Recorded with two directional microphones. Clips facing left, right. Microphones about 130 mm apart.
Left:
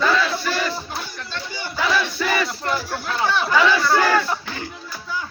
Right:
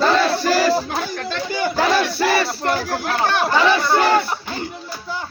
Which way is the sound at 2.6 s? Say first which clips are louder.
Right 4 dB; 55° right (ahead or behind).